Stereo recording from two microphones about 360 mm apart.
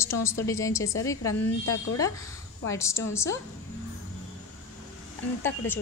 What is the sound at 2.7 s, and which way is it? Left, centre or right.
Speech, centre.